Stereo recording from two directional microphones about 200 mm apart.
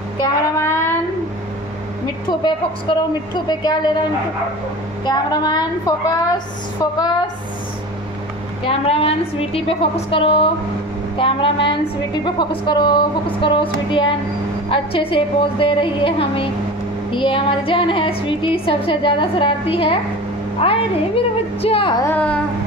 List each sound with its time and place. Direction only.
0.2 s child singing: 15° left (ahead or behind)
2.4 s a woman's voice: 20° left (ahead or behind)
5.0 s a woman's voice: 20° left (ahead or behind)
8.6 s a woman's voice: 30° left (ahead or behind)
22.0 s a child's voice: 5° left (ahead or behind)